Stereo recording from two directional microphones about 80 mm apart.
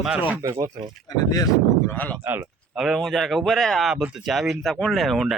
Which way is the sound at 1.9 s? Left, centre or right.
Centre.